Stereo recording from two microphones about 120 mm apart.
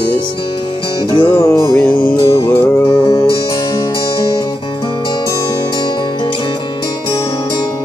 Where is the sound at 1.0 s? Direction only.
40° left (ahead or behind).